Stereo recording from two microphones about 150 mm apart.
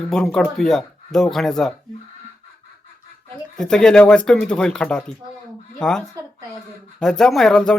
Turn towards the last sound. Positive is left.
turn(degrees=5)  # may be behind; listen again after turning